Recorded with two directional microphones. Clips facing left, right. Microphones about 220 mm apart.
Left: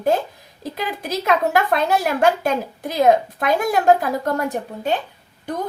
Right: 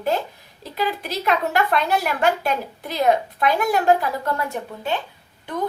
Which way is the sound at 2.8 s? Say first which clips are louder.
Left 4 dB; 45° left (ahead or behind).